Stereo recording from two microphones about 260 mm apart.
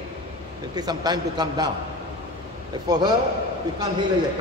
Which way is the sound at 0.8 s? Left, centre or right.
Centre.